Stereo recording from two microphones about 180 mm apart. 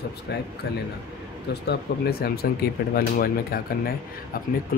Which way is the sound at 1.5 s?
60° left (ahead or behind).